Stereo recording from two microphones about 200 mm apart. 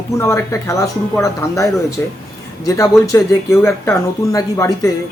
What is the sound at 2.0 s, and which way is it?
Speech, 10° left (ahead or behind).